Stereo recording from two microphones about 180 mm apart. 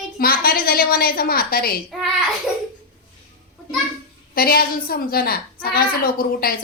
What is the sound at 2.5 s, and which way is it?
Babbling, 5° right (ahead or behind).